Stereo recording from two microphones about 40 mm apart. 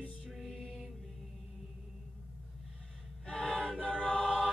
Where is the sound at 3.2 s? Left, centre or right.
Left.